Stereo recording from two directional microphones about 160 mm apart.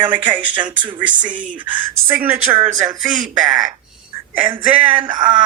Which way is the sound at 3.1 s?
55° right (ahead or behind).